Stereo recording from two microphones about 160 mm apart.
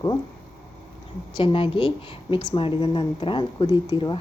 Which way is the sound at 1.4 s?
35° left (ahead or behind).